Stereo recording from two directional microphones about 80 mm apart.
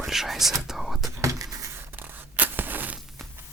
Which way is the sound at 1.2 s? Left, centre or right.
Right.